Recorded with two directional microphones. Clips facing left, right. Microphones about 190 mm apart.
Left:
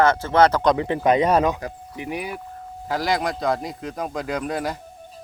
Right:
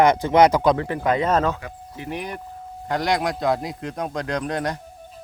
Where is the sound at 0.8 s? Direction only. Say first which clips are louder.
Left 3 dB; 20° left (ahead or behind); by 4.8 s 5° left (ahead or behind).